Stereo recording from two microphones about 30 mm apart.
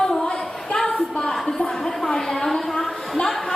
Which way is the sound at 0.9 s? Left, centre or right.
Left.